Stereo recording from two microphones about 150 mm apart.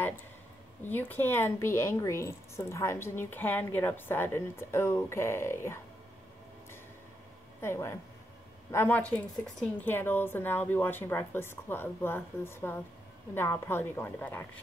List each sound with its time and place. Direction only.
0.8 s a woman's voice: 15° left (ahead or behind)
7.6 s a woman's voice: 20° left (ahead or behind)